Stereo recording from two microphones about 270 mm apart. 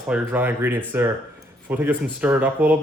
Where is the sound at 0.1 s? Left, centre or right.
Centre.